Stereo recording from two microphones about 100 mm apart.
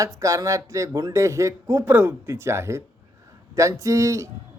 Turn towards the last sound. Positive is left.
turn(degrees=-30)  # may be behind; listen again after turning